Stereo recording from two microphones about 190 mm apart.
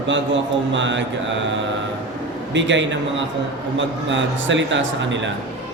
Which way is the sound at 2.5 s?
75° right (ahead or behind).